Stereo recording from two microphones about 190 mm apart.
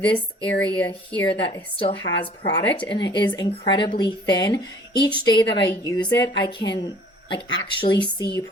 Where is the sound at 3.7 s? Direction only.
25° left (ahead or behind).